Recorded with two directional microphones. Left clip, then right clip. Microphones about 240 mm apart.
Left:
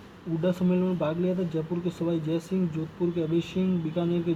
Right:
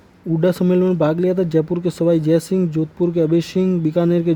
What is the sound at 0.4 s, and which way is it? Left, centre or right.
Speech, right.